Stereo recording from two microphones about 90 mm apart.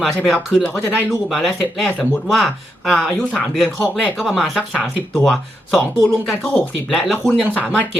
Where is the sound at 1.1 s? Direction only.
5° left (ahead or behind).